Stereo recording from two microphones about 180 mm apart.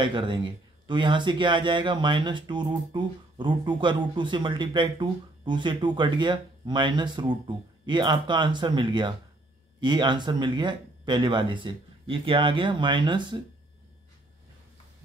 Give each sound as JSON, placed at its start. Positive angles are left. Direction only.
{"t": 0.0, "sound": "speech", "side_deg": -25}